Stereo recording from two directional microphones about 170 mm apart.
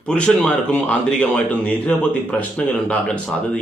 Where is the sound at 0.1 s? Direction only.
5° left (ahead or behind).